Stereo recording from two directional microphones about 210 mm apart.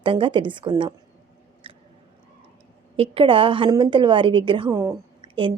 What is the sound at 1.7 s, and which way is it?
Biting, 25° right (ahead or behind).